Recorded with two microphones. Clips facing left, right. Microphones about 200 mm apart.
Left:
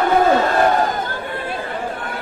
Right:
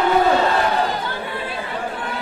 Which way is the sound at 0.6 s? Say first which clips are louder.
Left 4 dB; 50° left (ahead or behind).